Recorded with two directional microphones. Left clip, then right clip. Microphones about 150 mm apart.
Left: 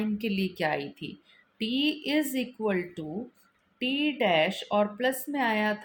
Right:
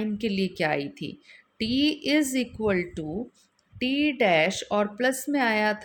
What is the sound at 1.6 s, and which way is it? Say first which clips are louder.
A woman's voice: right 3 dB; 75° right (ahead or behind).